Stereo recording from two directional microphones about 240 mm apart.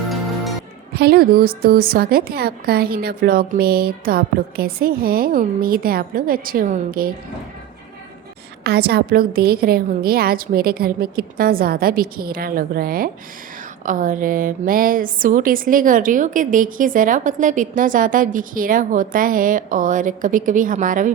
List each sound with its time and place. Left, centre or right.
0.9 s a woman's voice: right
8.6 s a woman's voice: right